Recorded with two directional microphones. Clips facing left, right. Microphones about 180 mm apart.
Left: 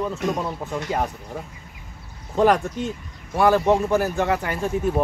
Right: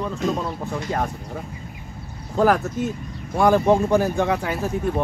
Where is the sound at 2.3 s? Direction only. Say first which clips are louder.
Even; centre (ahead or behind).